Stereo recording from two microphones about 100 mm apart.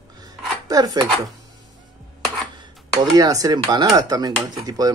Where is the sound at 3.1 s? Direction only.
40° right (ahead or behind).